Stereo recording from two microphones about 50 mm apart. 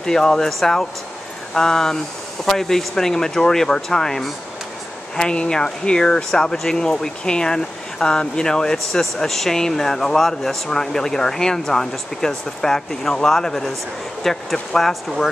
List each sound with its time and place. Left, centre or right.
0.0 s speech: centre